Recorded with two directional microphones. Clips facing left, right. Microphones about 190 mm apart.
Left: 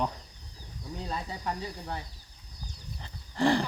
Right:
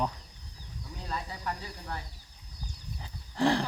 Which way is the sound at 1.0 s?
30° left (ahead or behind).